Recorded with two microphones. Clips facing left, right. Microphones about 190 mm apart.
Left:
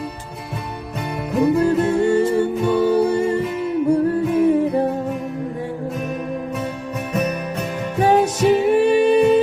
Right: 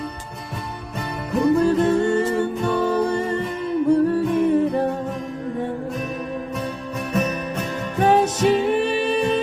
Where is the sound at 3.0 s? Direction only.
5° left (ahead or behind).